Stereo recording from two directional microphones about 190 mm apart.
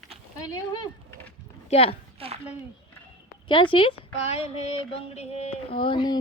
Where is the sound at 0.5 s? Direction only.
20° left (ahead or behind).